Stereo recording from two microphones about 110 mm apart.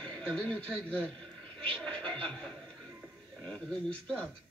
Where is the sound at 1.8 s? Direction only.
10° left (ahead or behind).